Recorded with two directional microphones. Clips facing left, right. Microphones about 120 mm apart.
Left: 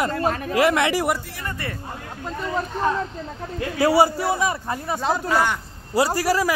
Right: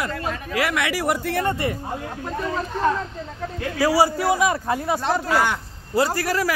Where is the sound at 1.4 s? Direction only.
20° right (ahead or behind).